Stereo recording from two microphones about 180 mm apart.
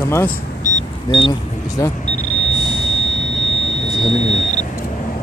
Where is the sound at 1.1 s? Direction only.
25° left (ahead or behind).